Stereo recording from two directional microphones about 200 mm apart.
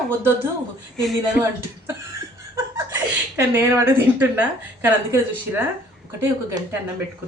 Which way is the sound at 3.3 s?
10° right (ahead or behind).